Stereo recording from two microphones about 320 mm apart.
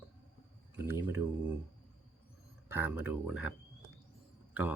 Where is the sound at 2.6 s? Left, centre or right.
Centre.